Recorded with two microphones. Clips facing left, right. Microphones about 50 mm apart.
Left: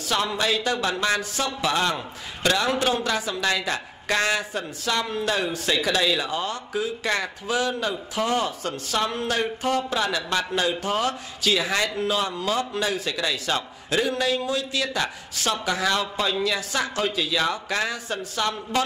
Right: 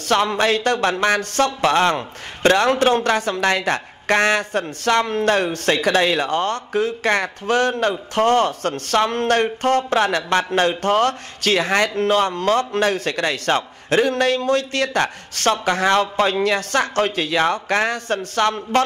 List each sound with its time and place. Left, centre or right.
0.0 s a man's voice: right